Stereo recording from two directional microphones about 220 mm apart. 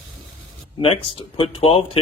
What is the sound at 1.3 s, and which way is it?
Speech, 25° left (ahead or behind).